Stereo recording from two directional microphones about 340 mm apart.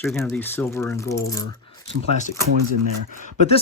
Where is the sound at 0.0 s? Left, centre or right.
Centre.